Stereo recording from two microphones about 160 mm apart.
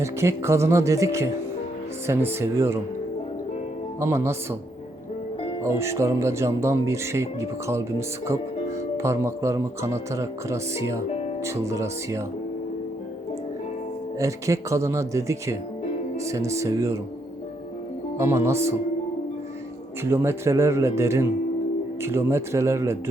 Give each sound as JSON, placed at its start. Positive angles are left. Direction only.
{"t": 0.0, "sound": "speech", "side_deg": -15}
{"t": 4.0, "sound": "speech", "side_deg": -15}
{"t": 5.6, "sound": "speech", "side_deg": -15}
{"t": 14.2, "sound": "speech", "side_deg": -20}
{"t": 18.2, "sound": "speech", "side_deg": -15}
{"t": 20.1, "sound": "speech", "side_deg": -15}